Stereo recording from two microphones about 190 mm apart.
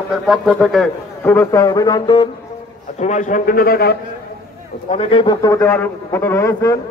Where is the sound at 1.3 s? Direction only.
15° left (ahead or behind).